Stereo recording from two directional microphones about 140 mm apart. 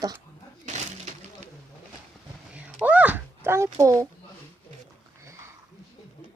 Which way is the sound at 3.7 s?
25° right (ahead or behind).